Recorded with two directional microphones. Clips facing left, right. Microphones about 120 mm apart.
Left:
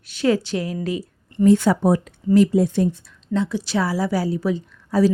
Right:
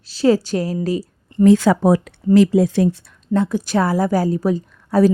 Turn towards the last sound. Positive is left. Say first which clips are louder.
# right 3 dB
turn(degrees=-55)  # may be behind; listen again after turning